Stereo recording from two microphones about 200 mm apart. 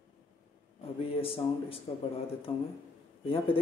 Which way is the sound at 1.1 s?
25° left (ahead or behind).